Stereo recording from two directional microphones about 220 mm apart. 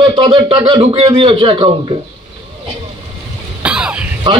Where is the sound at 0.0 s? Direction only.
20° right (ahead or behind).